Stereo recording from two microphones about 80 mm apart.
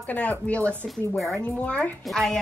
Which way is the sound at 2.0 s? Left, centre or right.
Centre.